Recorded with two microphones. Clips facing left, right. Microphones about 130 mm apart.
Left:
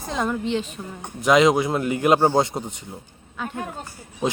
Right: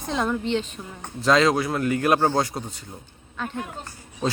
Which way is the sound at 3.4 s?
10° left (ahead or behind).